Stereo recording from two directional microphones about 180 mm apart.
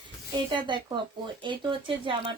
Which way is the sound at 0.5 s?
25° right (ahead or behind).